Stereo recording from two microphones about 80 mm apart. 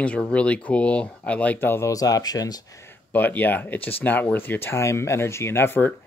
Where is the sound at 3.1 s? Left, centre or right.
Left.